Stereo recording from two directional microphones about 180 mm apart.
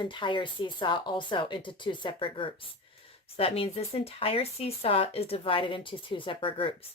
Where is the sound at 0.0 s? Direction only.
25° left (ahead or behind).